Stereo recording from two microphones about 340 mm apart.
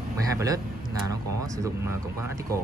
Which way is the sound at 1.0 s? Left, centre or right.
Centre.